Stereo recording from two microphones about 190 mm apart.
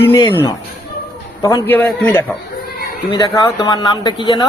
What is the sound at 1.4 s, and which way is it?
Speech, 15° left (ahead or behind).